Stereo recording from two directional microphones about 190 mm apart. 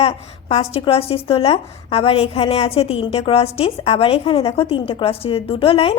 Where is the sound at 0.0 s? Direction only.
30° left (ahead or behind).